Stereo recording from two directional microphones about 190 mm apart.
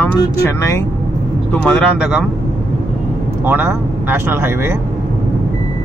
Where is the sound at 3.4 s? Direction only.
10° right (ahead or behind).